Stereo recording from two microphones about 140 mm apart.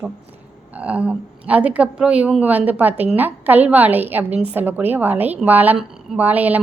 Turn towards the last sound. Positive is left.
turn(degrees=-10)  # may be behind; listen again after turning